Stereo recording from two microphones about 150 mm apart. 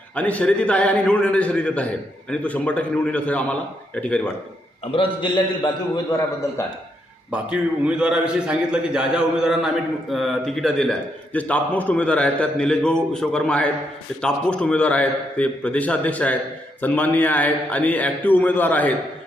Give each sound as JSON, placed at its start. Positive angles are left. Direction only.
{"t": 0.2, "sound": "a man's voice", "side_deg": 10}
{"t": 4.9, "sound": "a man's voice", "side_deg": 35}
{"t": 7.3, "sound": "a man's voice", "side_deg": -5}